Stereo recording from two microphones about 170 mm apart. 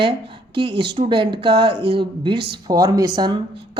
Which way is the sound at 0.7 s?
75° right (ahead or behind).